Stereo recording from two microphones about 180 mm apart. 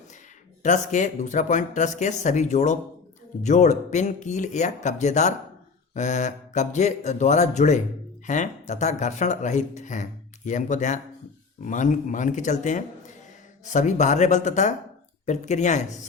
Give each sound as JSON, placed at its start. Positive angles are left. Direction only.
{"t": 0.6, "sound": "speech", "side_deg": 45}